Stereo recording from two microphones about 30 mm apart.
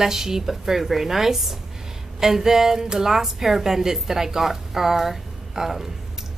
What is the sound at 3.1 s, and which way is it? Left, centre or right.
A woman's voice, centre.